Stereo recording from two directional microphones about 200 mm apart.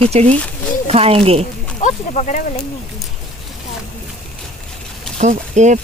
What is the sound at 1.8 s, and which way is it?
Speech, 35° left (ahead or behind).